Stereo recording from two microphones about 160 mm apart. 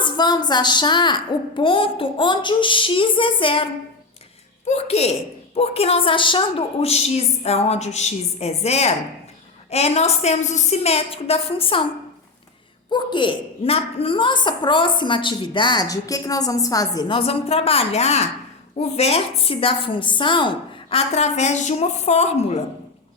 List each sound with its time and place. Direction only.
0.0 s a woman's voice: 25° left (ahead or behind)
12.9 s a woman's voice: 30° left (ahead or behind)
20.9 s a woman's voice: 45° left (ahead or behind)